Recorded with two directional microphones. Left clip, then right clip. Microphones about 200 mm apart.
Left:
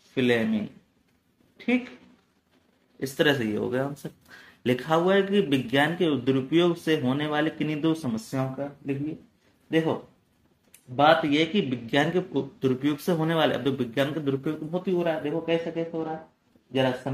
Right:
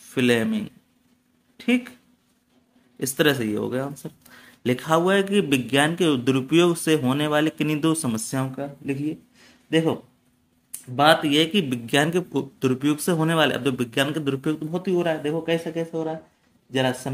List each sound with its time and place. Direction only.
0.1 s speech: 30° right (ahead or behind)
3.0 s speech: 25° right (ahead or behind); by 9.9 s 40° right (ahead or behind)
11.0 s speech: 35° right (ahead or behind)